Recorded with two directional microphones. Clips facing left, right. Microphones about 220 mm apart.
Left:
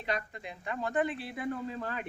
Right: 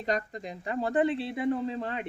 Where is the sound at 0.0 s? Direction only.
40° right (ahead or behind).